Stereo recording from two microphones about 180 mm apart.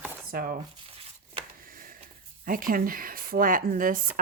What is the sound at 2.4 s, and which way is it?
Speech, 50° right (ahead or behind).